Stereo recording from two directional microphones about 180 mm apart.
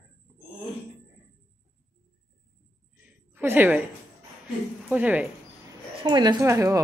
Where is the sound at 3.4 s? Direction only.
10° right (ahead or behind).